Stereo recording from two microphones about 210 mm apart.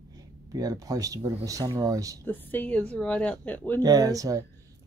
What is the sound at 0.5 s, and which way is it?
Speech, 15° right (ahead or behind).